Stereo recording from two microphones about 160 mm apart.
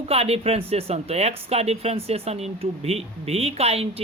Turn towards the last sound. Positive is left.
turn(degrees=-40)  # may be behind; listen again after turning